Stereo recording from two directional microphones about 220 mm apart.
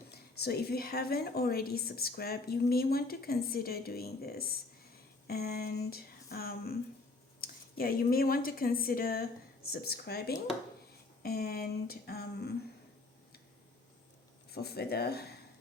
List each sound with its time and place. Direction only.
0.3 s a woman's voice: 45° left (ahead or behind)
14.5 s a woman's voice: 45° left (ahead or behind)